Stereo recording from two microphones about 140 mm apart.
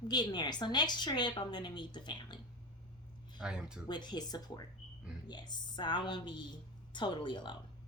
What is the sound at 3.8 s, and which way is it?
A woman's voice, 30° left (ahead or behind).